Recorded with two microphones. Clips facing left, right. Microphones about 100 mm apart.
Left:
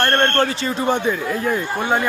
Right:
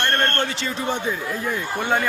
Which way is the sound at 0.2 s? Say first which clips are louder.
Left 5 dB; 35° left (ahead or behind).